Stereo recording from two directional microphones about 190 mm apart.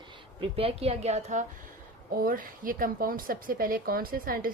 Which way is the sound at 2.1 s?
50° right (ahead or behind).